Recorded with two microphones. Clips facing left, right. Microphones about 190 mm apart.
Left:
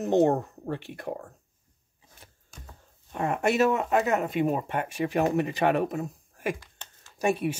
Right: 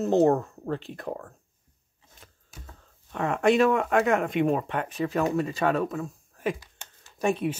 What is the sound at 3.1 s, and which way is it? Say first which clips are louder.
Speech: right 3 dB; 10° left (ahead or behind).